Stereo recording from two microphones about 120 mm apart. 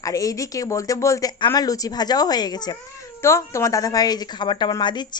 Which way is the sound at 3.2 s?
25° left (ahead or behind).